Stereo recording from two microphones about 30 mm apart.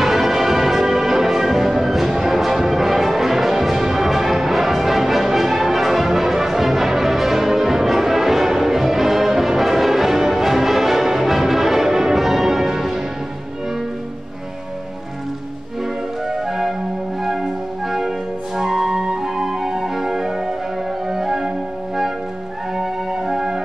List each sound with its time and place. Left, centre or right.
0.0 s music: centre
17.2 s music: centre
22.8 s music: centre